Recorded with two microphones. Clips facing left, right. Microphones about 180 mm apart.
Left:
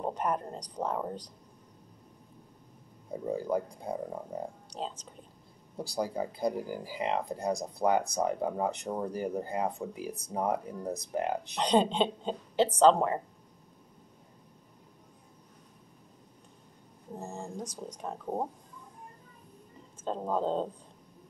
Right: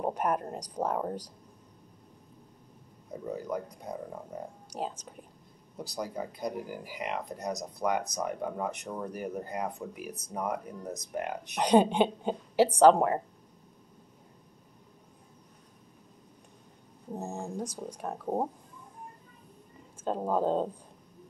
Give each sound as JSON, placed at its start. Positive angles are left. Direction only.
{"t": 0.0, "sound": "a woman's voice", "side_deg": -10}
{"t": 3.3, "sound": "speech", "side_deg": 30}
{"t": 4.6, "sound": "speech", "side_deg": -10}
{"t": 5.8, "sound": "speech", "side_deg": 30}
{"t": 11.5, "sound": "a woman's voice", "side_deg": -10}
{"t": 17.1, "sound": "a woman's voice", "side_deg": -20}
{"t": 20.1, "sound": "a woman's voice", "side_deg": -10}